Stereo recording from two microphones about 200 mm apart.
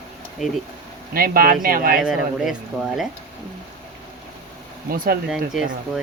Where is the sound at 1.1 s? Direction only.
50° right (ahead or behind).